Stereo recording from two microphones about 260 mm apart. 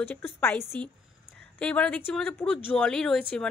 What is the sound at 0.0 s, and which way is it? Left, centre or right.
A woman's voice, centre.